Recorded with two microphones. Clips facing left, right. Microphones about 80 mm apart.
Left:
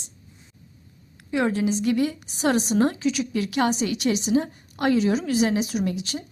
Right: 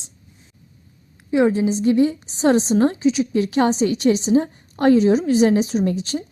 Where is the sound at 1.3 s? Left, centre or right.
Right.